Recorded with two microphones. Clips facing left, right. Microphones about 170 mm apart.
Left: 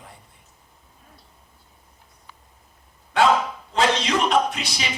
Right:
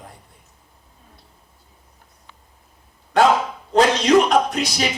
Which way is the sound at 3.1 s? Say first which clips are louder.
Right 3 dB; 40° right (ahead or behind).